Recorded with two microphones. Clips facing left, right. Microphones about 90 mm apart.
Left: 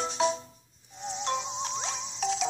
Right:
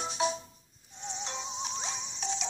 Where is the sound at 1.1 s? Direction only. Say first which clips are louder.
Left 8 dB; centre (ahead or behind).